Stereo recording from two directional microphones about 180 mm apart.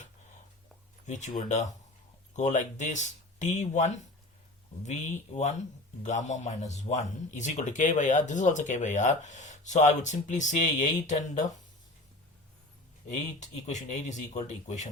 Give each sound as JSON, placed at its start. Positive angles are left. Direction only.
{"t": 1.0, "sound": "speech", "side_deg": 40}
{"t": 13.4, "sound": "speech", "side_deg": 40}